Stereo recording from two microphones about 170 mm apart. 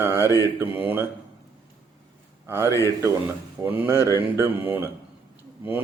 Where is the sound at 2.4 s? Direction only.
15° right (ahead or behind).